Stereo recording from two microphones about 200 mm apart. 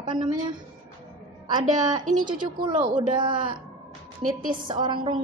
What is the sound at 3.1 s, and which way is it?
Speech, 25° right (ahead or behind).